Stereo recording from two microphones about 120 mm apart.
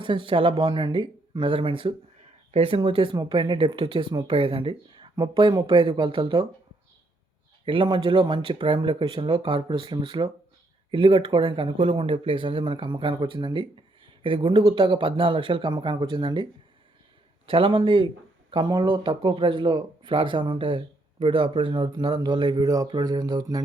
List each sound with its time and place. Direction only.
0.0 s speech: 45° right (ahead or behind)
4.3 s speech: 50° right (ahead or behind)
7.6 s speech: 45° right (ahead or behind)
11.8 s speech: 60° right (ahead or behind); by 23.6 s 30° right (ahead or behind)